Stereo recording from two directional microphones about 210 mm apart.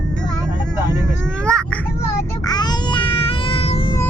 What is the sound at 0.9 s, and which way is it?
A child's voice, 5° left (ahead or behind).